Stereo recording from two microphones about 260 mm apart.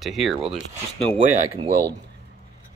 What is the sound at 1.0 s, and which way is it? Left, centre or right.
Speech, right.